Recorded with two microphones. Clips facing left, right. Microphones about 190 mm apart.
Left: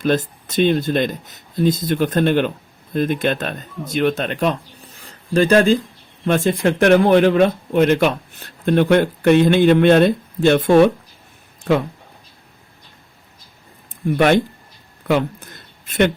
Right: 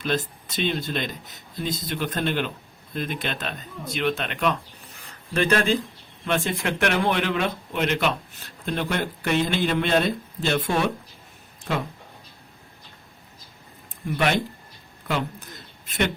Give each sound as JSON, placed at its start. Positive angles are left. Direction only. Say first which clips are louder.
{"t": 0.0, "sound": "speech", "louder": "left 8 dB", "side_deg": 45}
{"t": 8.6, "sound": "speech", "louder": "left 12 dB", "side_deg": 55}
{"t": 14.2, "sound": "speech", "louder": "left 9 dB", "side_deg": 50}